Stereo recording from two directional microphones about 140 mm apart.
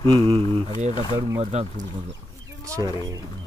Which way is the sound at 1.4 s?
55° right (ahead or behind).